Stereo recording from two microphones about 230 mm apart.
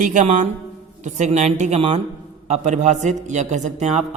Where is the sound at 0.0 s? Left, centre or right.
Right.